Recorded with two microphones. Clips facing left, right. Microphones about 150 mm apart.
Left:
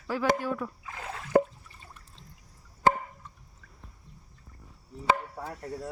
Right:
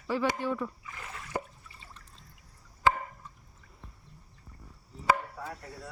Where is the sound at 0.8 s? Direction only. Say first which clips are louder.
Left 5 dB; 90° left.